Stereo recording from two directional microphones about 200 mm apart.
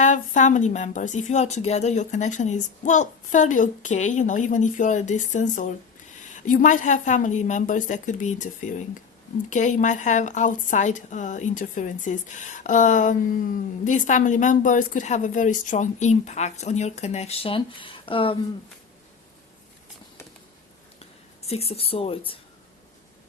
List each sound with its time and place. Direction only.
0.0 s a woman's voice: 40° left (ahead or behind)
21.4 s speech: 30° left (ahead or behind)